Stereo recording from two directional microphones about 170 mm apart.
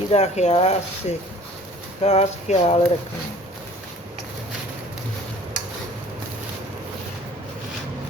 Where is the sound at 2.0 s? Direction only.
40° left (ahead or behind).